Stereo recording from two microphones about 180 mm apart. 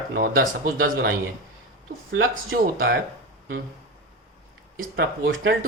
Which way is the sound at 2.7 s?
55° right (ahead or behind).